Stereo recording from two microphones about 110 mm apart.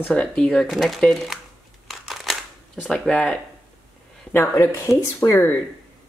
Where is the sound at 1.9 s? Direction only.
Centre (ahead or behind).